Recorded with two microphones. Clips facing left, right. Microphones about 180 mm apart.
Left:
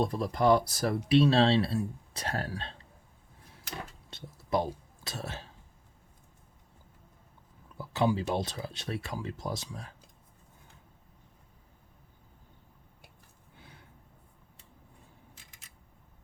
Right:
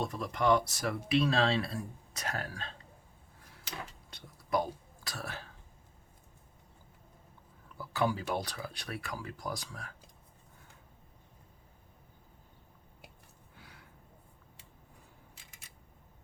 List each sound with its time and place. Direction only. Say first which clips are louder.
0.0 s speech: left 5 dB; 35° left (ahead or behind)
4.1 s speech: left 2 dB; 25° left (ahead or behind)
7.8 s speech: left 4 dB; 20° left (ahead or behind)